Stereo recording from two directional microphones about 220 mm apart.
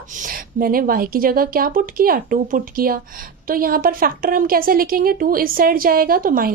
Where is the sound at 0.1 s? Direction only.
40° right (ahead or behind).